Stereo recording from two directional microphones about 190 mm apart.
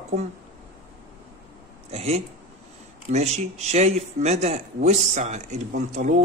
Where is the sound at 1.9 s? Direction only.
35° right (ahead or behind).